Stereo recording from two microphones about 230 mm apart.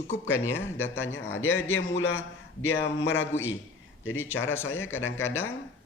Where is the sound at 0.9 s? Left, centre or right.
Left.